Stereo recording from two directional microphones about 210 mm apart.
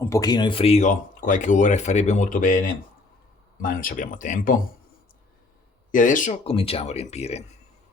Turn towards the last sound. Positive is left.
turn(degrees=30)  # may be behind; listen again after turning